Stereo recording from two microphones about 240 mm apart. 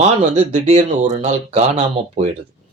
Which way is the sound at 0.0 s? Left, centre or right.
Right.